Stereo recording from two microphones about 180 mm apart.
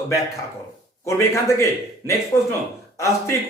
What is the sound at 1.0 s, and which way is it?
A man's voice, 15° left (ahead or behind).